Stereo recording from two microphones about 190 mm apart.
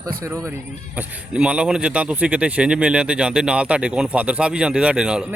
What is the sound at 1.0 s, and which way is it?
A man's voice, 5° right (ahead or behind).